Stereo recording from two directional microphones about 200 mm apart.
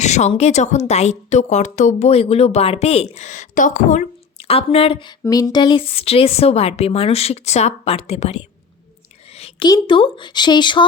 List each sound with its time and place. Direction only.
0.0 s a woman's voice: 35° left (ahead or behind)